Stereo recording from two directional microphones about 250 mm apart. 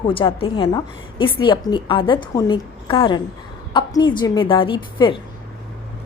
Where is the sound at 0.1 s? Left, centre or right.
Left.